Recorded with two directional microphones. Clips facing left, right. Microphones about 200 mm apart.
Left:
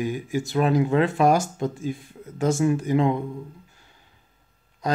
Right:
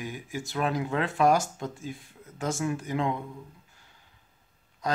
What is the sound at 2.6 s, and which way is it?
Speech, 20° left (ahead or behind).